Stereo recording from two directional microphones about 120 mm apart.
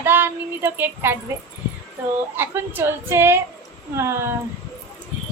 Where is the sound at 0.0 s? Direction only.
15° right (ahead or behind).